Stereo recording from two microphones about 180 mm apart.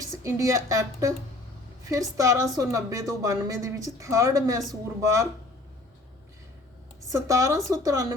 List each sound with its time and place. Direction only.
0.2 s a woman's voice: 20° right (ahead or behind)
7.1 s a woman's voice: 15° right (ahead or behind)